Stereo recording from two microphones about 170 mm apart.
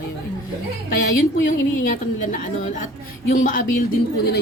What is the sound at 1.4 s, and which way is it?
Speech, 55° left (ahead or behind).